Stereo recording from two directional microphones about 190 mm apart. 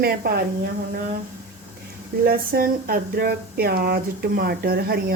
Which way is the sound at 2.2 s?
50° right (ahead or behind).